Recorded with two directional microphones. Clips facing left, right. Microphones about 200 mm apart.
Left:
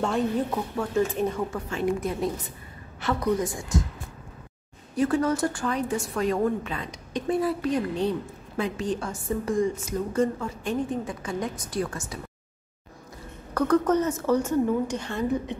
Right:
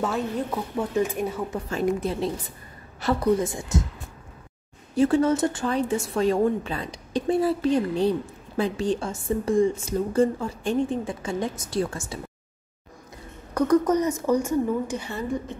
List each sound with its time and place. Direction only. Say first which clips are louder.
0.0 s a woman's voice: left 2 dB; centre (ahead or behind)
0.7 s a woman's voice: even; 15° right (ahead or behind)
1.7 s a woman's voice: right 3 dB; 35° right (ahead or behind)
4.9 s a woman's voice: right 4 dB; 25° right (ahead or behind)
13.6 s a woman's voice: right 2 dB; 10° right (ahead or behind)